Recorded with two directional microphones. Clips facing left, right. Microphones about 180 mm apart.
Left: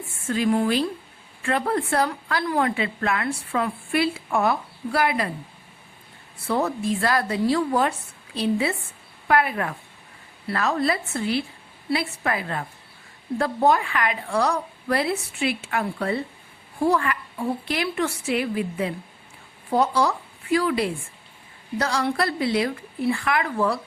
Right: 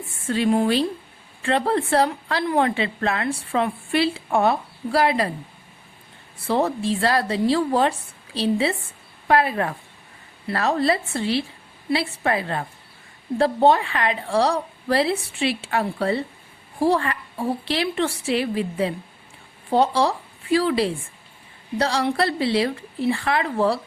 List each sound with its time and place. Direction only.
0.3 s a woman's voice: 30° right (ahead or behind)
6.5 s a woman's voice: 30° right (ahead or behind)